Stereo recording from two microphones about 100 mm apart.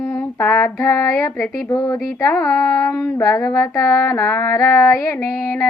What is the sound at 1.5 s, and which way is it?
Female singing, 35° left (ahead or behind).